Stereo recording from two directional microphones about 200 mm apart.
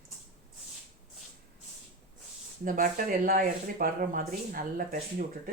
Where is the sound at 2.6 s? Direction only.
45° right (ahead or behind).